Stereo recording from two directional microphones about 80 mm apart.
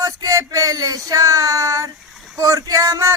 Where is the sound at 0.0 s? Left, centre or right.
Right.